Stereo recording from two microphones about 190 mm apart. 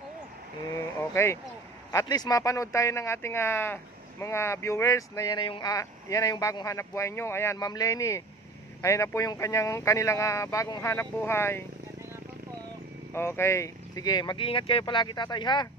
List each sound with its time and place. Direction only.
1.1 s speech: 15° left (ahead or behind)
13.1 s speech: 15° left (ahead or behind)